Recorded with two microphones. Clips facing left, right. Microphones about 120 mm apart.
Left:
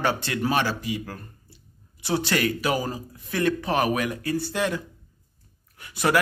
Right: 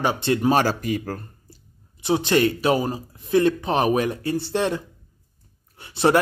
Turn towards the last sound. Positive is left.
turn(degrees=-30)  # may be behind; listen again after turning